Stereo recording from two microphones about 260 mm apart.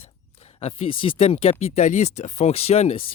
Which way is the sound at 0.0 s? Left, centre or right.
Left.